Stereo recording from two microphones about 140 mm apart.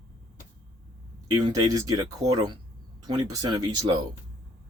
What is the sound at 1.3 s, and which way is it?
Speech, 30° right (ahead or behind).